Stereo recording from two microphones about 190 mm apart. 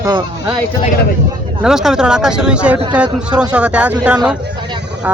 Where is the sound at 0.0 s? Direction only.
25° right (ahead or behind).